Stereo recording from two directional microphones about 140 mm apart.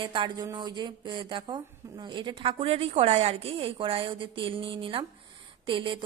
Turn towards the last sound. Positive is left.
turn(degrees=-35)  # may be behind; listen again after turning